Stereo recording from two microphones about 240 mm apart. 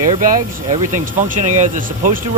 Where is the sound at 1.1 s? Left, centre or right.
Right.